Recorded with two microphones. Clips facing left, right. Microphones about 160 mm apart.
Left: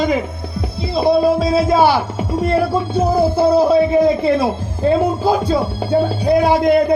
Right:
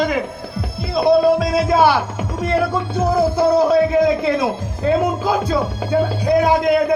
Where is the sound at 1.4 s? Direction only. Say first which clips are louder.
Left 2 dB; 30° left (ahead or behind).